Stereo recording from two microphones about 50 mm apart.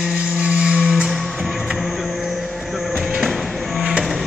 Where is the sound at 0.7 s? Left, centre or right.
Centre.